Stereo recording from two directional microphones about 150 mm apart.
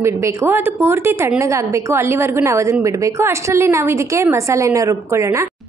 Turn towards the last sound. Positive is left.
turn(degrees=-20)  # may be behind; listen again after turning